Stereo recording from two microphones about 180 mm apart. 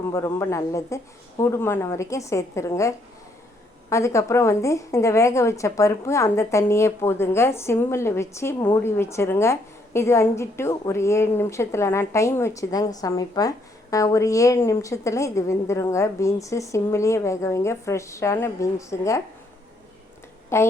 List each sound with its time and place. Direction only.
0.1 s a woman's voice: 15° left (ahead or behind)
20.5 s a woman's voice: 15° left (ahead or behind)